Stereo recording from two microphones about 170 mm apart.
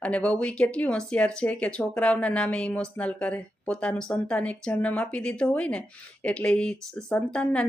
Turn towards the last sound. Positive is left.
turn(degrees=5)  # may be behind; listen again after turning